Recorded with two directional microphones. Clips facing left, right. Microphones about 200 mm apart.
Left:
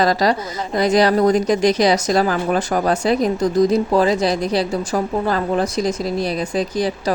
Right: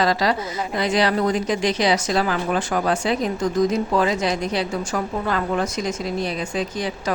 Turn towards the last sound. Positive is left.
turn(degrees=35)  # may be behind; listen again after turning